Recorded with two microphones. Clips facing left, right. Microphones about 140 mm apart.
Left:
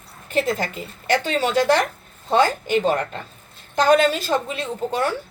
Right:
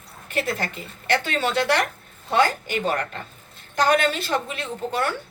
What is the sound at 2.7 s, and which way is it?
Speech, 30° left (ahead or behind).